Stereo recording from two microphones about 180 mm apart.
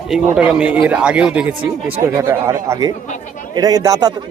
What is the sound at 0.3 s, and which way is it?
A man's voice, 5° right (ahead or behind).